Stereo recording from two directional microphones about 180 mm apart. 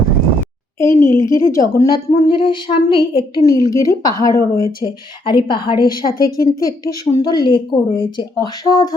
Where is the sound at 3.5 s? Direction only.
20° left (ahead or behind).